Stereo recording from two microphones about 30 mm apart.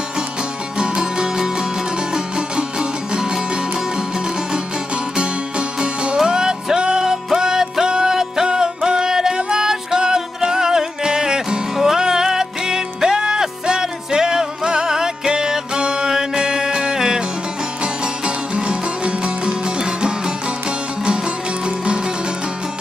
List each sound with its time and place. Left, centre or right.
0.7 s music: right
6.1 s music: right
18.2 s music: right
21.6 s music: right